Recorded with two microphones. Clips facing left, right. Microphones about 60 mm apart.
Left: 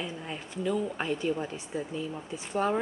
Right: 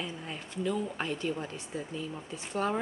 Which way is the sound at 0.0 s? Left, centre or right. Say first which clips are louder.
Left 2 dB; centre.